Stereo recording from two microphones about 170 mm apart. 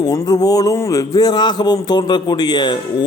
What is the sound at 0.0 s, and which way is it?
A man's voice, 20° left (ahead or behind).